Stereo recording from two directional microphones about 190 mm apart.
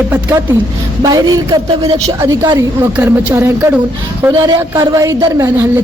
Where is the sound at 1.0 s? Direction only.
20° right (ahead or behind).